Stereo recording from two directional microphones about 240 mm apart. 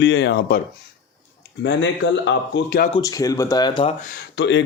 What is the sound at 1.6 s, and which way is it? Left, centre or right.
Speech, left.